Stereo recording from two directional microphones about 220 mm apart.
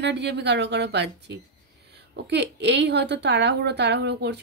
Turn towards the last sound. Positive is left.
turn(degrees=-50)  # may be behind; listen again after turning